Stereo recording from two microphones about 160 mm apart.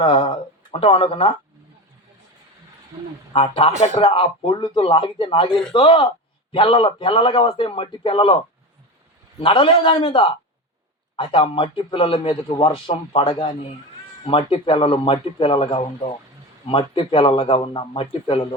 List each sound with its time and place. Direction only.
0.0 s a man's voice: 35° left (ahead or behind)
3.3 s a man's voice: 35° left (ahead or behind)
9.4 s a man's voice: 35° left (ahead or behind)